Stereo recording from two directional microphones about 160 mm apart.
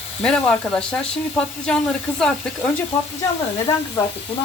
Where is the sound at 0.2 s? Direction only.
5° left (ahead or behind).